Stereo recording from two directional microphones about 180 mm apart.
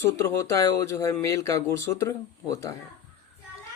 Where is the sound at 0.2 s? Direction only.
15° left (ahead or behind).